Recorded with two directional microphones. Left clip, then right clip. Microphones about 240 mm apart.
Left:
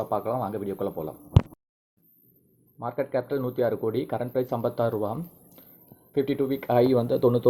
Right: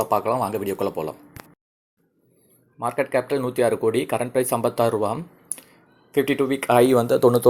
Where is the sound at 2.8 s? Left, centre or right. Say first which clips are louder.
Right 6 dB; centre.